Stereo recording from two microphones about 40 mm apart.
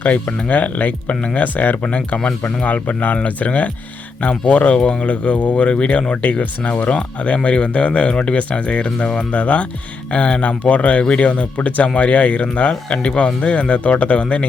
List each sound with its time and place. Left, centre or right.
0.0 s speech: left
2.6 s speech: left